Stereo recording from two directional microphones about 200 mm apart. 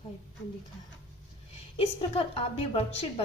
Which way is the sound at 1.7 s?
30° left (ahead or behind).